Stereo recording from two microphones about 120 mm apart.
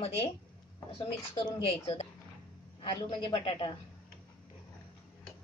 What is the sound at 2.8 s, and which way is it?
Speech, 45° left (ahead or behind).